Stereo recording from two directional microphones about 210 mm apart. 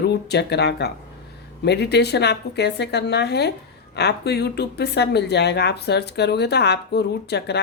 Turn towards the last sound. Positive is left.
turn(degrees=50)  # may be behind; listen again after turning